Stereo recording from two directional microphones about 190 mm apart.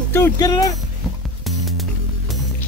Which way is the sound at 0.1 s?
15° left (ahead or behind).